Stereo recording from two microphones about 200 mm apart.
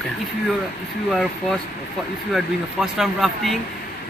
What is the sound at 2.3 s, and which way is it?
Speech, centre (ahead or behind).